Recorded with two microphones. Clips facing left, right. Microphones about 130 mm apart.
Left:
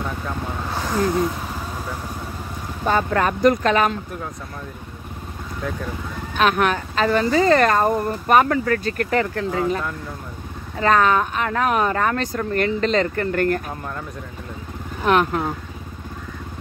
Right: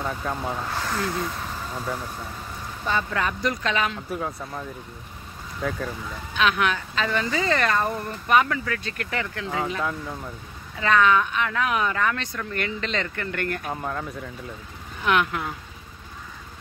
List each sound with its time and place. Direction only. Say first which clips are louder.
0.7 s gasp: left 5 dB; 15° left (ahead or behind)
2.8 s speech: left 6 dB; 50° left (ahead or behind)
5.6 s speech: even; 5° left (ahead or behind)
6.3 s speech: left 4 dB; 45° left (ahead or behind)
10.8 s speech: left 3 dB; 40° left (ahead or behind)
13.7 s speech: right 1 dB; 5° right (ahead or behind)
15.0 s speech: left 5 dB; 40° left (ahead or behind)